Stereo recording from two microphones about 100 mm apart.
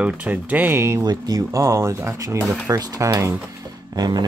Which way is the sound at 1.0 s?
40° right (ahead or behind).